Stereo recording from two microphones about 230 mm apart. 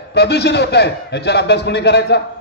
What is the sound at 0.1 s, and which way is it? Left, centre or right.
A man's voice, left.